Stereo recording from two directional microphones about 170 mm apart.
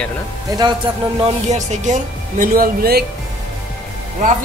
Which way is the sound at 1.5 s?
45° right (ahead or behind).